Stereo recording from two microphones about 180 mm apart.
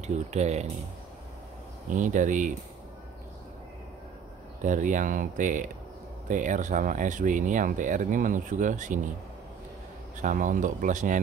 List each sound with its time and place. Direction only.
0.0 s speech: 40° right (ahead or behind)
1.9 s speech: 45° right (ahead or behind)
4.6 s speech: 45° right (ahead or behind)
10.2 s speech: 45° right (ahead or behind)